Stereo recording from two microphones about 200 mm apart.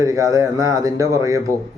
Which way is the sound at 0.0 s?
15° right (ahead or behind).